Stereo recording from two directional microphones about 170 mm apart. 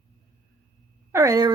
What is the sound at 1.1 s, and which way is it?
Speech, 20° right (ahead or behind).